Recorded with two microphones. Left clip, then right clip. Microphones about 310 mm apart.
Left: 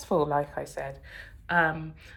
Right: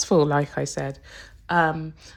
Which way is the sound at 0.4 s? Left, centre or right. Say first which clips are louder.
Right 6 dB; right.